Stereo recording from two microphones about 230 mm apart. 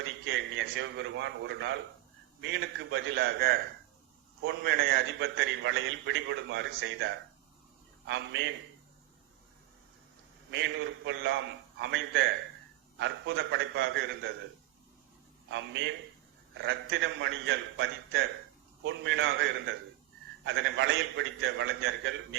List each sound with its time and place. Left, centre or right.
0.0 s a man's voice: right
10.5 s a man's voice: right
15.4 s a man's voice: right
18.8 s a man's voice: right